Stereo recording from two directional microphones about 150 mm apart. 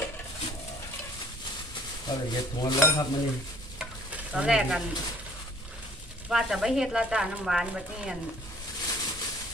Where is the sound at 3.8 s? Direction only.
5° right (ahead or behind).